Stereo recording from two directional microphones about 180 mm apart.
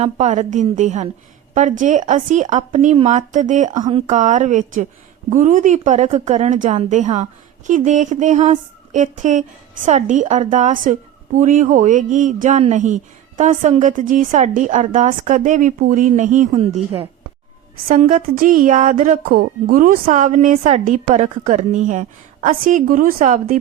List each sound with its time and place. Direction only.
0.0 s a woman's voice: 40° right (ahead or behind)
3.8 s speech: 25° right (ahead or behind)
4.0 s a woman's voice: 45° right (ahead or behind)
18.1 s speech: 45° right (ahead or behind)